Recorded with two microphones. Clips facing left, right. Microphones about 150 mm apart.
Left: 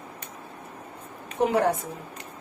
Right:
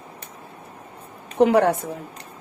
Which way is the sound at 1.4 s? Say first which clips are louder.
Right 6 dB; 90° right.